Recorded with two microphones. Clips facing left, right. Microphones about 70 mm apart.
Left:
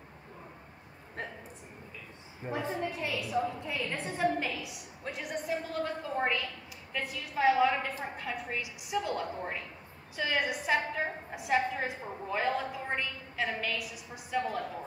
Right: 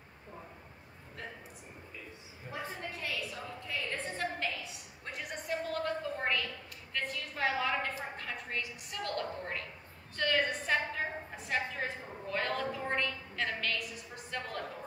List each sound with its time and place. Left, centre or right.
2.4 s a woman's voice: left; by 4.7 s centre
5.0 s a woman's voice: centre